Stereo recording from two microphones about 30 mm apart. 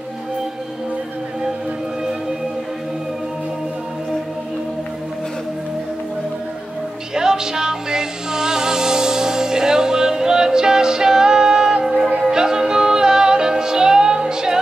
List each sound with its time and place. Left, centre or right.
7.2 s music: right